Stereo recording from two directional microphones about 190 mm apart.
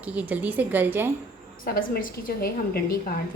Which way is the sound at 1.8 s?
50° left (ahead or behind).